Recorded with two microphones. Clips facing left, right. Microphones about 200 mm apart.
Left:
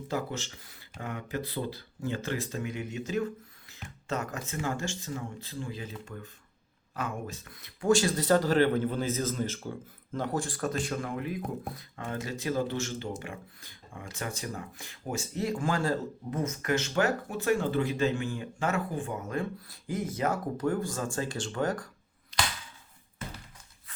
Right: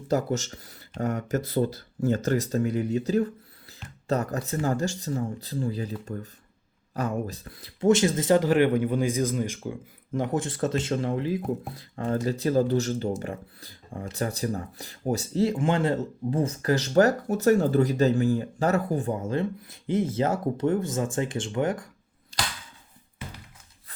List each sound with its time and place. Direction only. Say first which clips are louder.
0.1 s speech: right 8 dB; 40° right (ahead or behind); by 21.8 s 20° right (ahead or behind)